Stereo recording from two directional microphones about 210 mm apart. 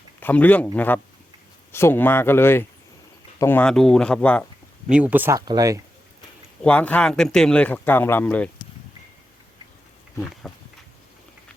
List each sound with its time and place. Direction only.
0.2 s speech: 10° left (ahead or behind)
4.9 s speech: 5° right (ahead or behind)
6.6 s speech: 5° left (ahead or behind)
10.4 s speech: 5° left (ahead or behind)